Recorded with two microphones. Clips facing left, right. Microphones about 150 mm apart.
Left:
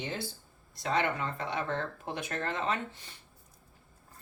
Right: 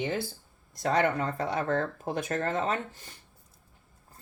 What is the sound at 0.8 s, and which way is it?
Speech, 45° right (ahead or behind).